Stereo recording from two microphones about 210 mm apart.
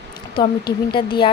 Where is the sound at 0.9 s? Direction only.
20° left (ahead or behind).